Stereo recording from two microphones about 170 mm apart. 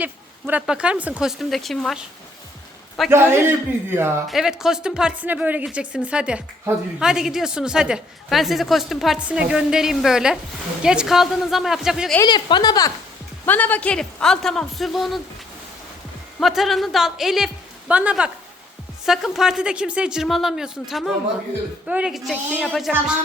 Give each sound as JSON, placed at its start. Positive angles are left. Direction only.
{"t": 0.0, "sound": "a woman's voice", "side_deg": -10}
{"t": 3.1, "sound": "a man's voice", "side_deg": -15}
{"t": 12.2, "sound": "a woman's voice", "side_deg": 25}
{"t": 13.4, "sound": "a woman's voice", "side_deg": 10}
{"t": 16.4, "sound": "a woman's voice", "side_deg": 0}